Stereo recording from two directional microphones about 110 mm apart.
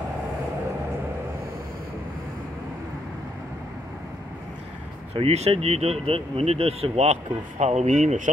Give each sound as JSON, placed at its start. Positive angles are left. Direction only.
{"t": 5.1, "sound": "speech", "side_deg": -70}